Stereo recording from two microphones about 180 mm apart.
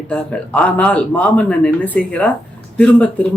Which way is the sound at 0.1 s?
5° left (ahead or behind).